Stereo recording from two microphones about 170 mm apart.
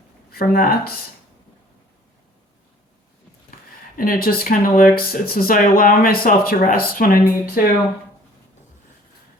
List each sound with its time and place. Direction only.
0.3 s speech: 60° left (ahead or behind)
3.9 s speech: 55° left (ahead or behind)